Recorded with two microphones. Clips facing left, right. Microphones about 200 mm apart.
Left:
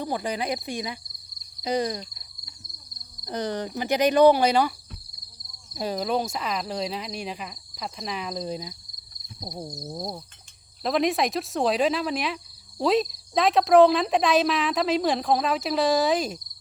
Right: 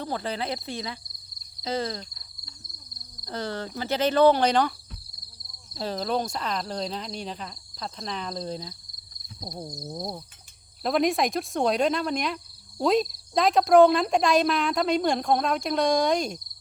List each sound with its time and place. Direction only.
0.0 s speech: 15° left (ahead or behind)
1.6 s a sound: 15° left (ahead or behind)
3.2 s speech: 15° left (ahead or behind)
5.7 s speech: 10° left (ahead or behind)
9.4 s cricket: 5° left (ahead or behind)